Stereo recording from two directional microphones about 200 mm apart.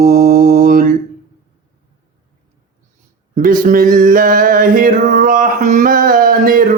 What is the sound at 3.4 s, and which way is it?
Male singing, 45° right (ahead or behind).